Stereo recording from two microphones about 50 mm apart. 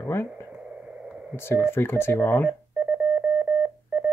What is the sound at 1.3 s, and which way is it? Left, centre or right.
Speech, left.